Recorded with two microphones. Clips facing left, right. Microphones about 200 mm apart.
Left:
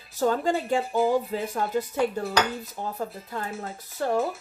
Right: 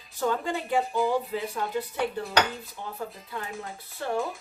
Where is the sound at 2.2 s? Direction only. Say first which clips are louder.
Left 1 dB; 40° left (ahead or behind).